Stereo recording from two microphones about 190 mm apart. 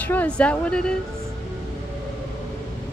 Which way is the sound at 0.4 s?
5° left (ahead or behind).